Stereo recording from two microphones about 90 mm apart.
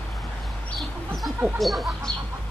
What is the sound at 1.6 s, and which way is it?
Chicken, centre (ahead or behind).